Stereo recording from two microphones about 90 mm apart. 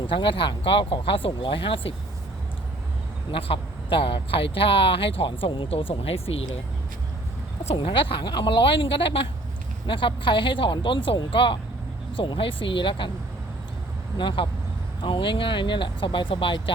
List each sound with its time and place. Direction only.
0.1 s speech: 70° left (ahead or behind); by 2.0 s 85° left
3.3 s speech: 85° left
7.8 s speech: 80° left
9.8 s speech: 70° left (ahead or behind)
14.2 s speech: 65° left (ahead or behind)